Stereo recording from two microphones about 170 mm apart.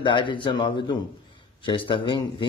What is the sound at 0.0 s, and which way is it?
A man's voice, 30° left (ahead or behind).